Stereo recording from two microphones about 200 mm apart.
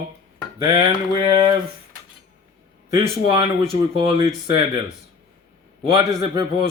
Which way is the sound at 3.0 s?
25° right (ahead or behind).